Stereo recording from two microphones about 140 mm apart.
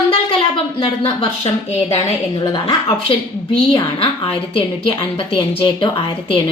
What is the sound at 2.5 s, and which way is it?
Speech, 40° left (ahead or behind).